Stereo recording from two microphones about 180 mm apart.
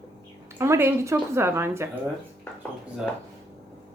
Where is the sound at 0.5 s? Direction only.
15° right (ahead or behind).